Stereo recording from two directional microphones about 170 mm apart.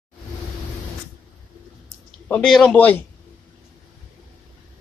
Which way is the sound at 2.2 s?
5° left (ahead or behind).